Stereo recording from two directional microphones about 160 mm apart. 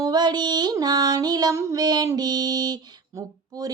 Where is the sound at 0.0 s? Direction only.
25° right (ahead or behind).